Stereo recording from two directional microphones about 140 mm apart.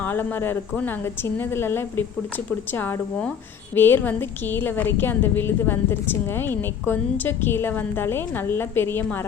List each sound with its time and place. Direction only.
0.0 s a woman's voice: 15° left (ahead or behind)